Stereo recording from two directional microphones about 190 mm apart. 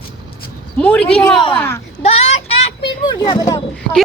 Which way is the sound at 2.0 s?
35° left (ahead or behind).